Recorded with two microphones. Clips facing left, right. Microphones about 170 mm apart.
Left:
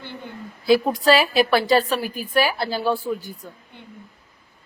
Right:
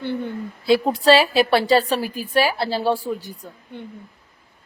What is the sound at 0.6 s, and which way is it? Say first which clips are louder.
A woman's voice: even; 25° right (ahead or behind).